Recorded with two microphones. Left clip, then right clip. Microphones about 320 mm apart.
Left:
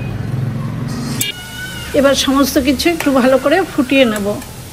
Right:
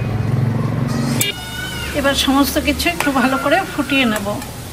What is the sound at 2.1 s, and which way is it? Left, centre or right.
A woman's voice, centre.